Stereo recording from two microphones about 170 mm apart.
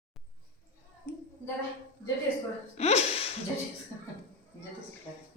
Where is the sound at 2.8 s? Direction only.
40° left (ahead or behind).